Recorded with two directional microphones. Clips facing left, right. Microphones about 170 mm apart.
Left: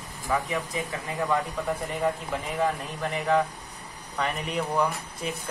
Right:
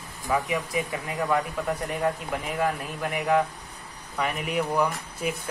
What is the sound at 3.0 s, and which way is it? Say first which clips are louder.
Speech: right 1 dB; 10° right (ahead or behind).